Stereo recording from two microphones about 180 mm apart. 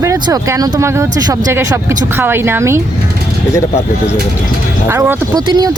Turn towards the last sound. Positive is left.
turn(degrees=-20)  # may be behind; listen again after turning